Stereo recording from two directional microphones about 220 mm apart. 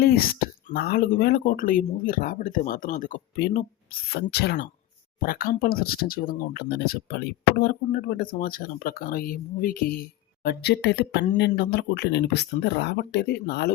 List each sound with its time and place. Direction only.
0.0 s speech: 45° left (ahead or behind)